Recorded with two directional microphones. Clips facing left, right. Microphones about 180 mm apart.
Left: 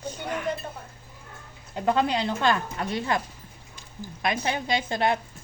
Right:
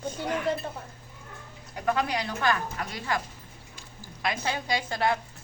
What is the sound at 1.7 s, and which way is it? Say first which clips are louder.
A man's voice: left 4 dB; 25° left (ahead or behind).